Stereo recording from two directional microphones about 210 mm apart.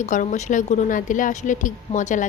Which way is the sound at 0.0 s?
35° left (ahead or behind).